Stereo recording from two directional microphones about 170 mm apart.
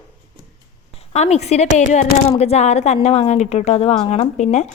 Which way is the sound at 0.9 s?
35° left (ahead or behind).